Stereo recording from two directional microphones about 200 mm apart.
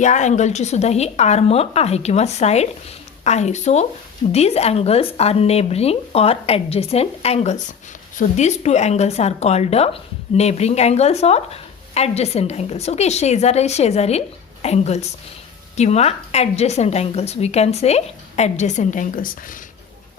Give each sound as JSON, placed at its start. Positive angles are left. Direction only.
{"t": 0.0, "sound": "a woman's voice", "side_deg": 35}